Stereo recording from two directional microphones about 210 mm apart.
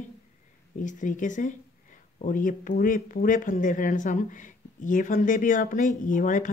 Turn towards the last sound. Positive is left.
turn(degrees=40)  # may be behind; listen again after turning